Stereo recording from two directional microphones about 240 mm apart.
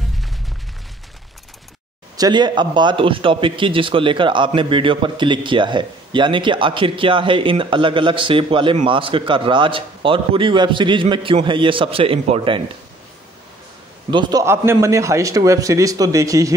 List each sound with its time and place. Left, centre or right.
2.1 s a man's voice: centre
14.1 s a man's voice: centre